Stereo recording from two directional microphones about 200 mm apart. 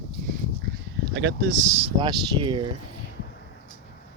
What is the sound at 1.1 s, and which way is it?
Speech, 60° right (ahead or behind).